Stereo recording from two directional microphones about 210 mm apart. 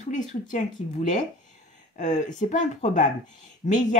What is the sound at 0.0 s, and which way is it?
Speech, 35° left (ahead or behind).